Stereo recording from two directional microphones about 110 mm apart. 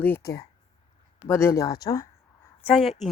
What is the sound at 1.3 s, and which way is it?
Speech, 25° left (ahead or behind).